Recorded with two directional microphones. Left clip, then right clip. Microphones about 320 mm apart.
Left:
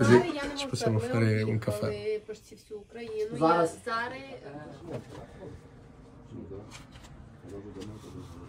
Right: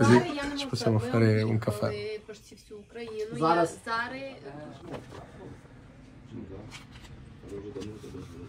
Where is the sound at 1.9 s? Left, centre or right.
Centre.